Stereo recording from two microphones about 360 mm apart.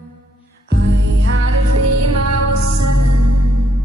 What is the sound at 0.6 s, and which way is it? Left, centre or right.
Music, right.